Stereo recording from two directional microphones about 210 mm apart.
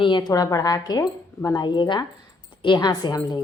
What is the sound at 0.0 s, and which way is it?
Speech, 20° left (ahead or behind).